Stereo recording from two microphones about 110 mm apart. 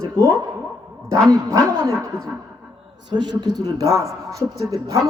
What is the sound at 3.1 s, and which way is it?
Speech, 40° right (ahead or behind).